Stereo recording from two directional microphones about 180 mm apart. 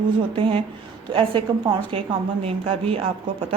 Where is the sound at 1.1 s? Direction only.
30° right (ahead or behind).